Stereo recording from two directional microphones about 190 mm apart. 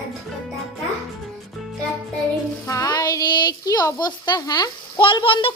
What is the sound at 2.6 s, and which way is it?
Speech, 20° left (ahead or behind).